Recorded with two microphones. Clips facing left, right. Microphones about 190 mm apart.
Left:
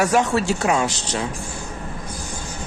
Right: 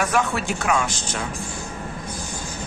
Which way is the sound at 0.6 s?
25° left (ahead or behind).